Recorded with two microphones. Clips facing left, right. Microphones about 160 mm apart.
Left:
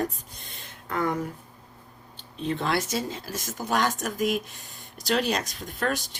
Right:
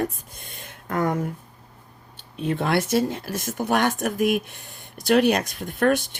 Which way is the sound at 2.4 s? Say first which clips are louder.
Right 4 dB; 55° right (ahead or behind).